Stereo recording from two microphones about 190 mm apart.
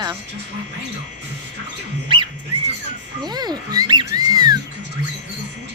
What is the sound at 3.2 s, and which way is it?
Music, 20° right (ahead or behind).